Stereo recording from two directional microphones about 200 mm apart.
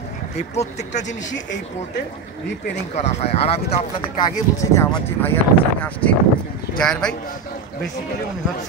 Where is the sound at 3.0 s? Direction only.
35° left (ahead or behind).